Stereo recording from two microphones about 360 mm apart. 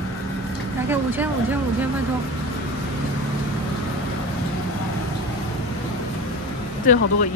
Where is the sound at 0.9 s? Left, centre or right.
Centre.